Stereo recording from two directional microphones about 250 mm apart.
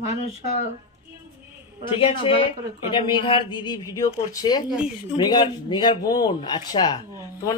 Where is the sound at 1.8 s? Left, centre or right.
Left.